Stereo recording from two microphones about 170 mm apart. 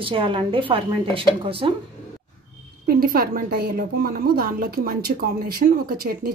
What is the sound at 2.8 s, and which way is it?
A woman's voice, 60° right (ahead or behind).